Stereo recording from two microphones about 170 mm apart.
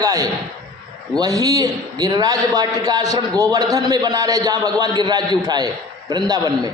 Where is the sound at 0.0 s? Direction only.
20° right (ahead or behind).